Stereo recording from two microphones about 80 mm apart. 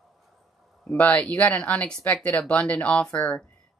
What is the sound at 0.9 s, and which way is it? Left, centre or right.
A woman's voice, centre.